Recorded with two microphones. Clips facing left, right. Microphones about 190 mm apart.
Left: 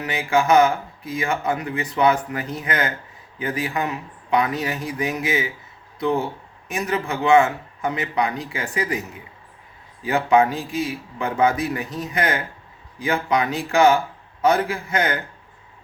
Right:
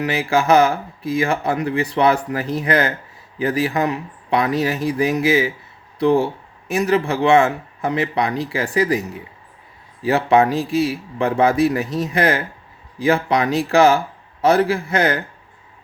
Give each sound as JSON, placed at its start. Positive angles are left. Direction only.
{"t": 0.1, "sound": "speech", "side_deg": -35}
{"t": 10.0, "sound": "speech", "side_deg": -35}